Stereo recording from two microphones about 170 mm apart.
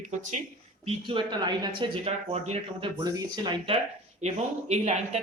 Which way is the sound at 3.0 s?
20° right (ahead or behind).